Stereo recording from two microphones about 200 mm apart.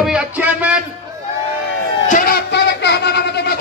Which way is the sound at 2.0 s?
45° left (ahead or behind).